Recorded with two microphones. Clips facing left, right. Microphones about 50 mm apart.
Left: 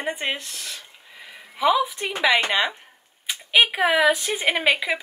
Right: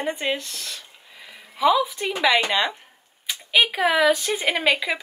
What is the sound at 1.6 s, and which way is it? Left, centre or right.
Speech, centre.